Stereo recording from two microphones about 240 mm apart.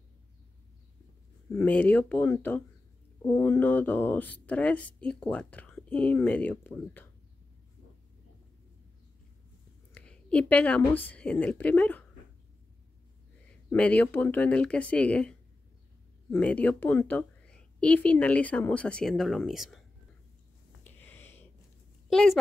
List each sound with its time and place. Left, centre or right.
1.5 s speech: centre
9.9 s a woman's voice: centre
13.7 s a woman's voice: centre
20.8 s a sound: centre
22.1 s a woman's voice: centre